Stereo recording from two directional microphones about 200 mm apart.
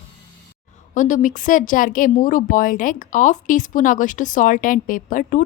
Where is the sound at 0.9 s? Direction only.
40° left (ahead or behind).